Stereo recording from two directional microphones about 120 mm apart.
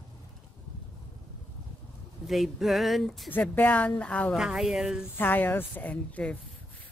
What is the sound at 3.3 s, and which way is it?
A woman's voice, 15° left (ahead or behind).